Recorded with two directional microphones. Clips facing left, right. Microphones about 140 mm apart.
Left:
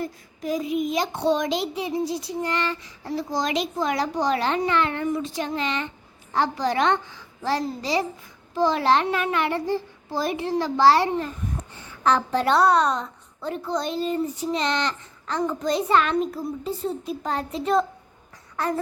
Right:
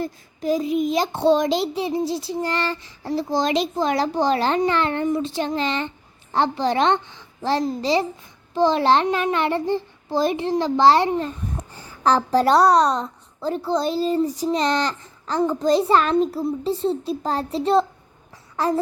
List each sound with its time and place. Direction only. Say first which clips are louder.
0.0 s a woman's voice: right 4 dB; 30° right (ahead or behind)
11.7 s a woman's voice: right 3 dB; 35° right (ahead or behind)